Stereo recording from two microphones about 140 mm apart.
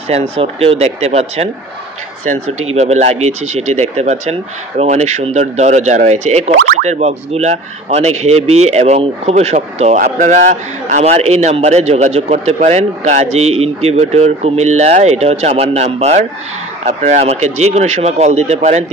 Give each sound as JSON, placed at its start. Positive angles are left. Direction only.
{"t": 0.1, "sound": "speech", "side_deg": -45}
{"t": 9.9, "sound": "speech", "side_deg": -70}